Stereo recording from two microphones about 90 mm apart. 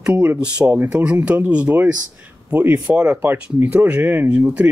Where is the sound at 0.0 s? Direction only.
15° right (ahead or behind).